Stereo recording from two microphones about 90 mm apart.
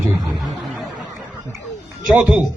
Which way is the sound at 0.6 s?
Centre (ahead or behind).